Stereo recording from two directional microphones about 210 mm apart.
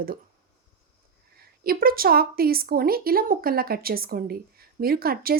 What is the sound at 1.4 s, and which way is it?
Speech, 45° right (ahead or behind).